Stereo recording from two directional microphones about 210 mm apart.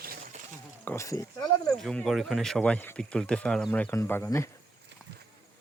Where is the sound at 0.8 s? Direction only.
15° left (ahead or behind).